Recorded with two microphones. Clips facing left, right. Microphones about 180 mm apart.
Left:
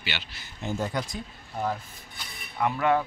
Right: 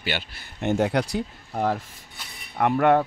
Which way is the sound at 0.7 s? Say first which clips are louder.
Right 8 dB; 70° right (ahead or behind).